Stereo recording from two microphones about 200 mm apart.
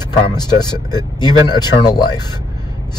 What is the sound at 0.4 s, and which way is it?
Speech, 20° left (ahead or behind).